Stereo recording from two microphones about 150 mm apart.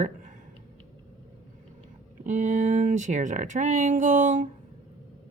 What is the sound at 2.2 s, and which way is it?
Speech, 55° right (ahead or behind).